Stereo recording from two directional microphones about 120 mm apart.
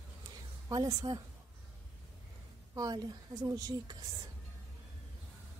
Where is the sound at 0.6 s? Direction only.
30° right (ahead or behind).